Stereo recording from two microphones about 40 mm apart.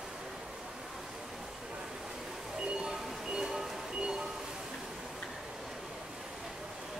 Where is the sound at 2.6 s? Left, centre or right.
Centre.